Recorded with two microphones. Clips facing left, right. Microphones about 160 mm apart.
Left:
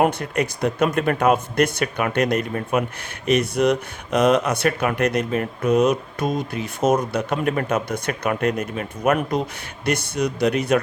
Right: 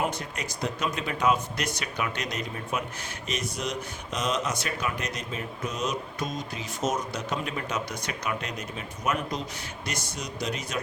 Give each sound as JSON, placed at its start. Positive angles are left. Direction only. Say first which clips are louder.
{"t": 0.0, "sound": "speech", "louder": "left 11 dB", "side_deg": 60}